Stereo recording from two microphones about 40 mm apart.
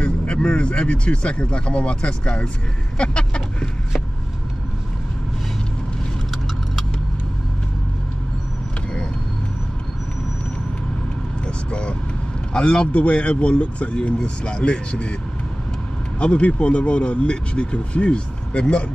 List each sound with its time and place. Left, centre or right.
0.0 s speech: left
3.0 s vehicle: left
11.4 s vehicle: left
12.5 s speech: left
12.9 s speech: left
16.2 s speech: left